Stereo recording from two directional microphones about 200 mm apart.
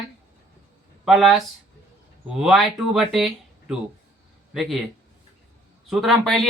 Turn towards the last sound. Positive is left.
turn(degrees=0)  # may be behind; listen again after turning